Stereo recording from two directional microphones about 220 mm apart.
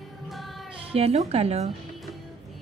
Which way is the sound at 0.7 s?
25° right (ahead or behind).